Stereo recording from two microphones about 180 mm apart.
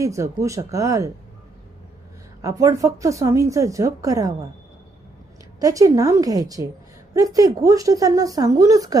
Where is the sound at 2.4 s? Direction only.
15° right (ahead or behind).